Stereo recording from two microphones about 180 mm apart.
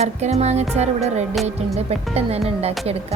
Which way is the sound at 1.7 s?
35° right (ahead or behind).